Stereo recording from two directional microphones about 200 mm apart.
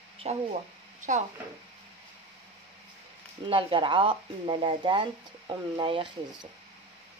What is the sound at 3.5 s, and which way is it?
Speech, 25° right (ahead or behind).